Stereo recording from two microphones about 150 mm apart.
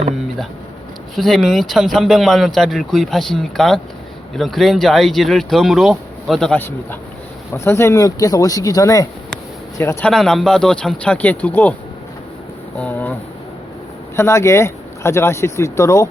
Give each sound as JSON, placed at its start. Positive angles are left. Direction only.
{"t": 1.1, "sound": "speech", "side_deg": 0}
{"t": 7.5, "sound": "speech", "side_deg": 15}
{"t": 10.0, "sound": "speech", "side_deg": 5}
{"t": 12.7, "sound": "a sound", "side_deg": 10}
{"t": 14.2, "sound": "speech", "side_deg": 20}